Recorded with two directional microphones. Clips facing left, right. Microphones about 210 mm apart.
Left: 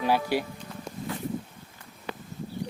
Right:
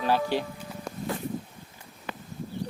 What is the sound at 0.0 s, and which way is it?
Speech, 10° left (ahead or behind).